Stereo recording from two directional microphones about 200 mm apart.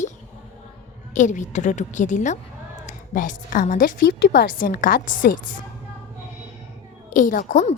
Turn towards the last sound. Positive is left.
turn(degrees=40)  # may be behind; listen again after turning